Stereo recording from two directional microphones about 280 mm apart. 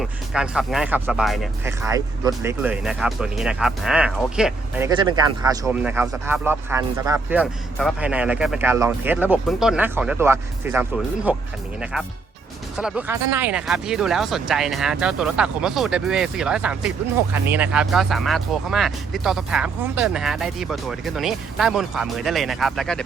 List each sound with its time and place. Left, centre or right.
0.0 s speech: centre
1.8 s speech: centre
4.9 s speech: centre